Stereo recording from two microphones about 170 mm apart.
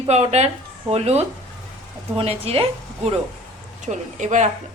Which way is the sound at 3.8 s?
45° right (ahead or behind).